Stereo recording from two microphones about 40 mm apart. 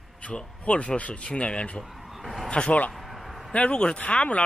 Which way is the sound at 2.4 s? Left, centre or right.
Left.